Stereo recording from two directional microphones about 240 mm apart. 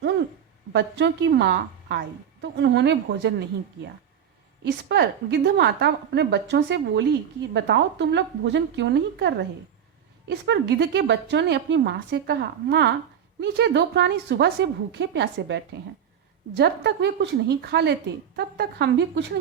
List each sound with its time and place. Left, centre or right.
0.7 s a woman's voice: right
4.6 s a woman's voice: right